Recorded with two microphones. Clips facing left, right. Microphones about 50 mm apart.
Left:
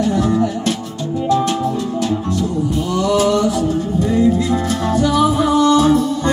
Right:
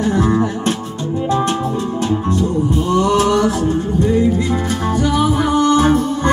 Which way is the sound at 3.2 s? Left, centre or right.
Right.